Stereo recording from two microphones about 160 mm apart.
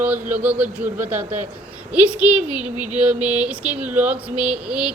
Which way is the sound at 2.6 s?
50° right (ahead or behind).